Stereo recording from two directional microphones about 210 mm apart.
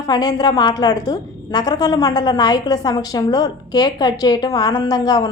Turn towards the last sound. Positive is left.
turn(degrees=15)  # may be behind; listen again after turning